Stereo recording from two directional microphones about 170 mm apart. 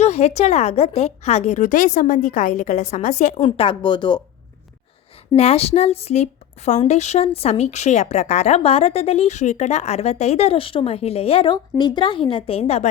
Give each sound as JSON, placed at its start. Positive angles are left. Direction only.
{"t": 0.0, "sound": "a woman's voice", "side_deg": 40}
{"t": 3.4, "sound": "speech", "side_deg": 30}
{"t": 5.4, "sound": "a woman's voice", "side_deg": 35}